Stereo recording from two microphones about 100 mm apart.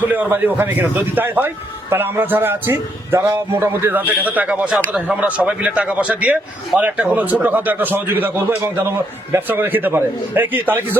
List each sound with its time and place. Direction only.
0.1 s a man's voice: 20° right (ahead or behind)